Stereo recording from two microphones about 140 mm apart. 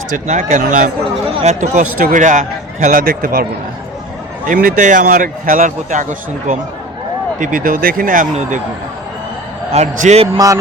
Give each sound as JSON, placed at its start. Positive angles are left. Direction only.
{"t": 0.1, "sound": "a man's voice", "side_deg": -60}
{"t": 1.4, "sound": "a man's voice", "side_deg": -55}
{"t": 4.4, "sound": "a man's voice", "side_deg": -75}
{"t": 9.7, "sound": "a man's voice", "side_deg": -55}
{"t": 10.3, "sound": "music", "side_deg": -25}